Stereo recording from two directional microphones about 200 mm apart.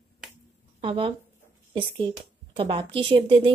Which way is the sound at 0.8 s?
25° right (ahead or behind).